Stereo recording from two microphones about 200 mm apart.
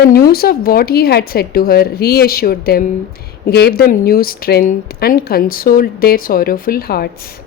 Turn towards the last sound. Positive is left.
turn(degrees=50)  # may be behind; listen again after turning